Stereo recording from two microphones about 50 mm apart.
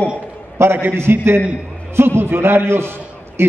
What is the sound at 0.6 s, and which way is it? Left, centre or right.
A man's voice, right.